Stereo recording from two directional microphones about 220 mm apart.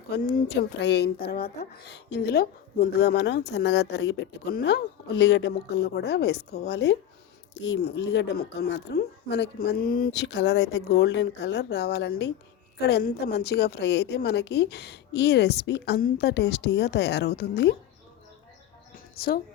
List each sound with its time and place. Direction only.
0.1 s a woman's voice: 45° left (ahead or behind)
19.1 s speech: 45° left (ahead or behind)